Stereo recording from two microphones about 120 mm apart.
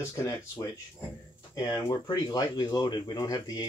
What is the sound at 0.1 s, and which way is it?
Speech, 25° left (ahead or behind).